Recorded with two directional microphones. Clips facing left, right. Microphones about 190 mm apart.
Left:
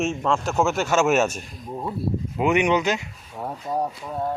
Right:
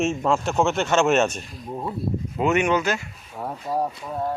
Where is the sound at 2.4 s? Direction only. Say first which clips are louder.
Left 1 dB; 15° left (ahead or behind).